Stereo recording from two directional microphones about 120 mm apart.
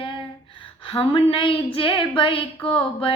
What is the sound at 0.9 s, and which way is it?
Female singing, 50° left (ahead or behind).